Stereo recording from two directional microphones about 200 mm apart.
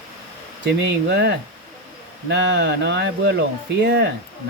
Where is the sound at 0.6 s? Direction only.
60° right (ahead or behind).